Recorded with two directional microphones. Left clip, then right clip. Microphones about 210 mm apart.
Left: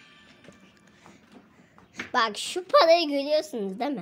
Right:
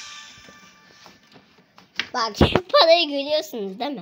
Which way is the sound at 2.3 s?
Centre (ahead or behind).